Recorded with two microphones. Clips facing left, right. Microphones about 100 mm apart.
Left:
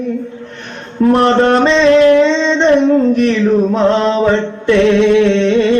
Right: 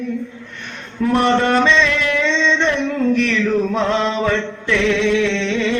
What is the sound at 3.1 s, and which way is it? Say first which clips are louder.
Mantra: left 6 dB; 40° left (ahead or behind).